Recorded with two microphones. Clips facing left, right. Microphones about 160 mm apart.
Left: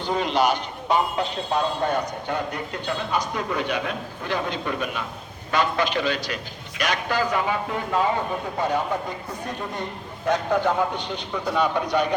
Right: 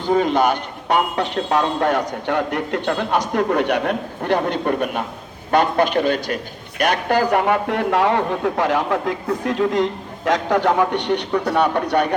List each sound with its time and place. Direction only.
0.0 s a man's voice: 50° right (ahead or behind)